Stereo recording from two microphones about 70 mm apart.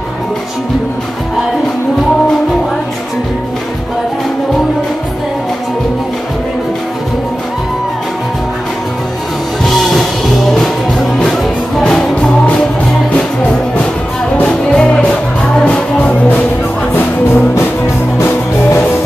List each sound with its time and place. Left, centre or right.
9.8 s music: centre
11.8 s music: centre
14.4 s music: centre
16.9 s music: left